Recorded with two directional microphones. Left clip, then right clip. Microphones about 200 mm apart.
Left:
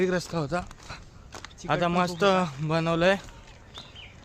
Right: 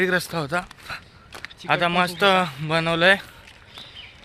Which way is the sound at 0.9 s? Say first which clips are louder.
Right 8 dB; 5° left (ahead or behind).